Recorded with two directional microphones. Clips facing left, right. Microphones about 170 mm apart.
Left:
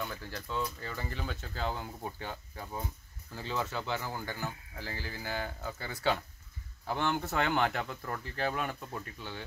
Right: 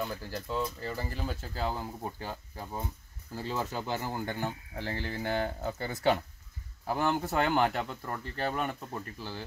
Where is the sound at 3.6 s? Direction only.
15° right (ahead or behind).